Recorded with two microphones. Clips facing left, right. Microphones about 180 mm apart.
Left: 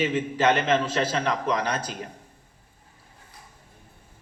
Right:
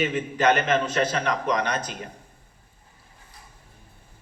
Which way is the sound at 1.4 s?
30° left (ahead or behind).